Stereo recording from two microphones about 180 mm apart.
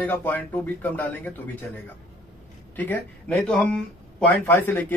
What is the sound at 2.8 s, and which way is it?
Speech, 10° left (ahead or behind).